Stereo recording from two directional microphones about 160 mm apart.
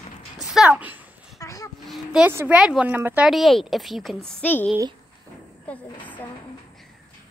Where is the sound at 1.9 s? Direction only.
5° right (ahead or behind).